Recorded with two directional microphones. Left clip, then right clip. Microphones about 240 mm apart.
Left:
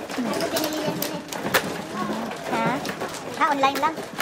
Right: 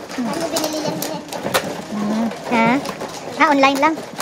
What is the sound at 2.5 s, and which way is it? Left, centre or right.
Bird, right.